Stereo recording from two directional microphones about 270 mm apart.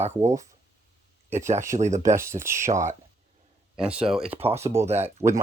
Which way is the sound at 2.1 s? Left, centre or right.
Centre.